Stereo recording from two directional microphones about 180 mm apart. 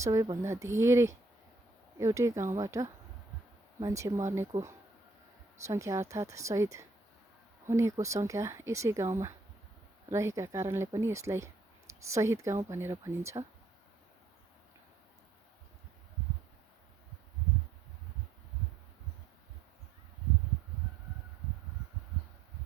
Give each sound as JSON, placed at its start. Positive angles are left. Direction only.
{"t": 0.0, "sound": "speech", "side_deg": -15}
{"t": 5.6, "sound": "speech", "side_deg": -15}